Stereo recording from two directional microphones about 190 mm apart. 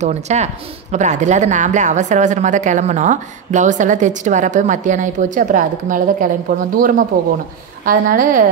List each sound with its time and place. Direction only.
0.0 s a woman's voice: 35° right (ahead or behind)